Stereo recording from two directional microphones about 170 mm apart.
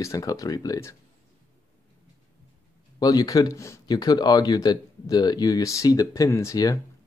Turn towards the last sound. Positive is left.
turn(degrees=20)  # may be behind; listen again after turning